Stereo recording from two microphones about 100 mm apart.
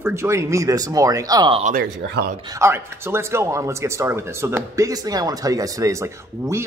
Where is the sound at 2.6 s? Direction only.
25° right (ahead or behind).